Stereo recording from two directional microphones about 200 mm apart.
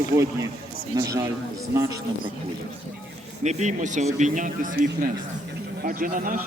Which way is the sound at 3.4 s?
35° right (ahead or behind).